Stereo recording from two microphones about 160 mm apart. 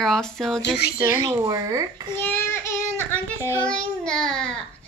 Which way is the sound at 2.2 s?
15° left (ahead or behind).